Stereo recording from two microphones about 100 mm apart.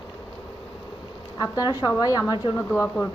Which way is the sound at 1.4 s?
40° left (ahead or behind).